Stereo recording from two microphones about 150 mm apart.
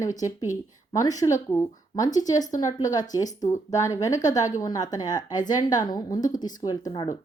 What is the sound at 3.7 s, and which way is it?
A woman's voice, 20° left (ahead or behind).